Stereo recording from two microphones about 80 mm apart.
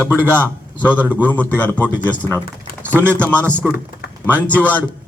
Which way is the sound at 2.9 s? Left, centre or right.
Right.